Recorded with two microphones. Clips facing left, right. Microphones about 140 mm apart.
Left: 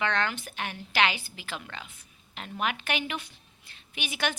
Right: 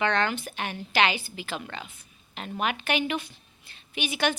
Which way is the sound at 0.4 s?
5° right (ahead or behind).